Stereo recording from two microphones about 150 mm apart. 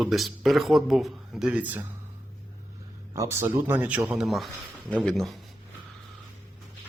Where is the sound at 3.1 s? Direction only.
20° right (ahead or behind); by 5.4 s centre (ahead or behind).